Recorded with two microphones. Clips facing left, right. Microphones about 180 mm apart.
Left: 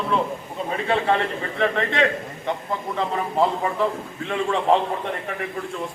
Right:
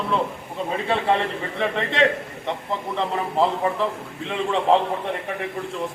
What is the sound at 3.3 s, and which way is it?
Speech, centre (ahead or behind).